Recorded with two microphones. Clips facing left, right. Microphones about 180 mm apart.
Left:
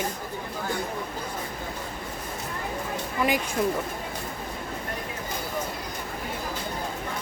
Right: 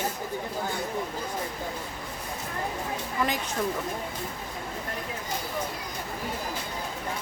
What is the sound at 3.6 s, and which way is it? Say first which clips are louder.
Speech: left 3 dB; 10° left (ahead or behind).